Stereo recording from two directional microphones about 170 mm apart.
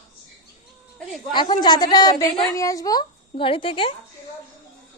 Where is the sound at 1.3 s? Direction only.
25° left (ahead or behind).